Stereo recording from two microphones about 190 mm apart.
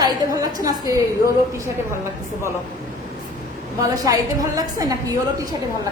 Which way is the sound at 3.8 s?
20° right (ahead or behind).